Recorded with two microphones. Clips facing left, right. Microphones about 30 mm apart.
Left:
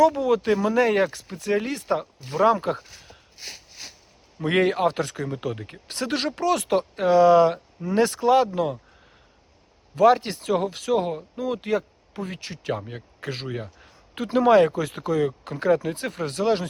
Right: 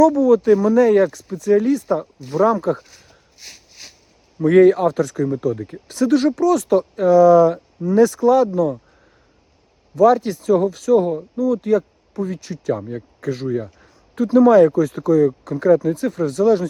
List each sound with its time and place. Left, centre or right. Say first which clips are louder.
0.0 s speech: right 6 dB; left
2.4 s speech: right 3 dB; left
2.7 s speech: right 2 dB; centre
3.3 s a sound: left 2 dB; centre
3.7 s a sound: even; centre
4.4 s speech: right 9 dB; left
7.5 s speech: right 7 dB; left
7.9 s speech: right 5 dB; left
9.9 s speech: right 4 dB; left
10.5 s speech: right 7 dB; left
10.8 s speech: right 8 dB; left